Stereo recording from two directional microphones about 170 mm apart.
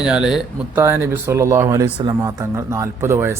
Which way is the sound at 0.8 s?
15° right (ahead or behind).